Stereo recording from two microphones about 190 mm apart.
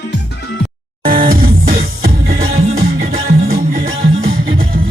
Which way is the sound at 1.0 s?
50° right (ahead or behind).